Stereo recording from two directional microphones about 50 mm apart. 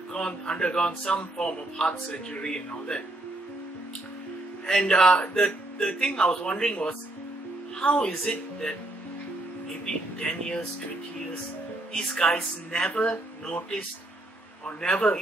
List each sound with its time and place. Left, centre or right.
0.1 s speech: centre
4.6 s speech: centre
9.8 s speech: left
11.9 s speech: centre